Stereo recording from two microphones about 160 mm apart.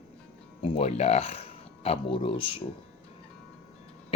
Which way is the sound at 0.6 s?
40° left (ahead or behind).